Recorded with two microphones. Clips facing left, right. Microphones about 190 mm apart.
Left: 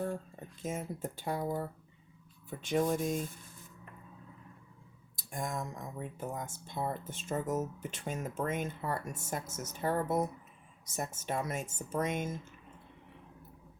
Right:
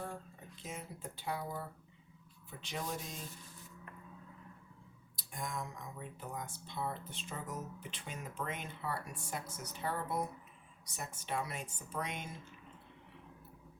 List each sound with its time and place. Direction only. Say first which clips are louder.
0.6 s speech: left 9 dB; 50° left (ahead or behind)
5.1 s speech: left 5 dB; 45° left (ahead or behind)